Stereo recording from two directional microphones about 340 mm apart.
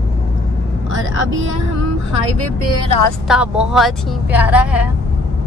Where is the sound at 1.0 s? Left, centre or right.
Right.